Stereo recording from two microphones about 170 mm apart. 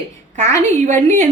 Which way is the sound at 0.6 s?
45° right (ahead or behind).